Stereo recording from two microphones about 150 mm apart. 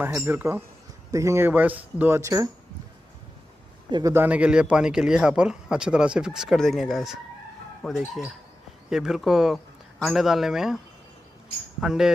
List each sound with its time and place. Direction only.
0.0 s speech: 15° right (ahead or behind)
4.1 s a man's voice: 10° right (ahead or behind)
11.8 s a man's voice: 5° right (ahead or behind)